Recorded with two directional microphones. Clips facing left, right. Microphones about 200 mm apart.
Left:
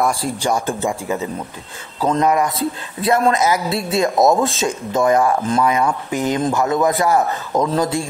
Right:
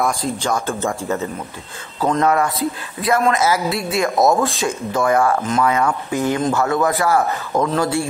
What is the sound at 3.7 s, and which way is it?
Speech, 30° left (ahead or behind).